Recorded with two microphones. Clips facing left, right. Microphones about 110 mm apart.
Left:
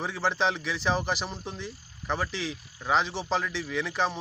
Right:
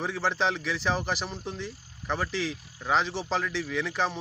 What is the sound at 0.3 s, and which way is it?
Speech, centre (ahead or behind).